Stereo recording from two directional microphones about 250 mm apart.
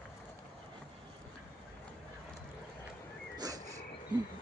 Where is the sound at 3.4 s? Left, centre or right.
Centre.